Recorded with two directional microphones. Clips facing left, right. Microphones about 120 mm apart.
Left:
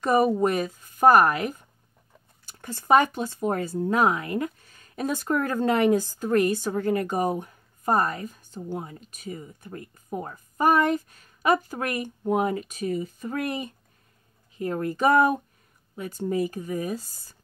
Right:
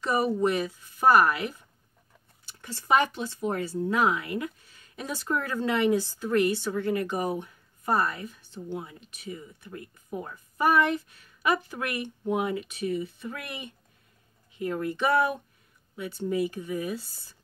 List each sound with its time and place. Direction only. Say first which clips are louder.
0.0 s a woman's voice: left 4 dB; 50° left (ahead or behind)